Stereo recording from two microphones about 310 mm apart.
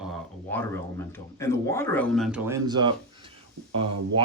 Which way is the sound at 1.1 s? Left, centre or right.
Centre.